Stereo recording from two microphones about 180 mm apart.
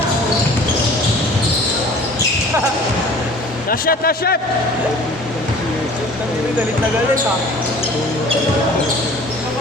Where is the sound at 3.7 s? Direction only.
55° left (ahead or behind).